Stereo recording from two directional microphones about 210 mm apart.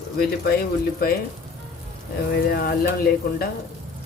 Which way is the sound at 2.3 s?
45° left (ahead or behind).